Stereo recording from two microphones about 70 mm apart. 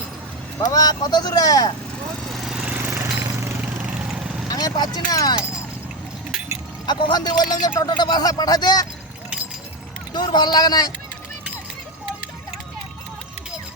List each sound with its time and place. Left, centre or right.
0.6 s speech: left
2.2 s lawn mower: centre
2.6 s lawn mower: right
2.8 s a sound: right
4.4 s speech: left
6.8 s speech: left
10.1 s speech: left